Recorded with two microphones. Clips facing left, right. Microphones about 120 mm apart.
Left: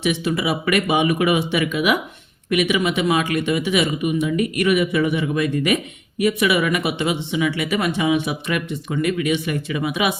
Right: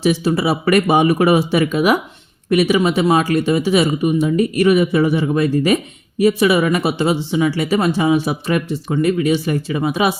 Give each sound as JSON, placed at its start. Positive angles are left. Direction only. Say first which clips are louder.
{"t": 0.0, "sound": "speech", "louder": "right 5 dB", "side_deg": -35}